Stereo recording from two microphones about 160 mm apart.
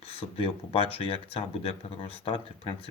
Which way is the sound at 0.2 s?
35° left (ahead or behind).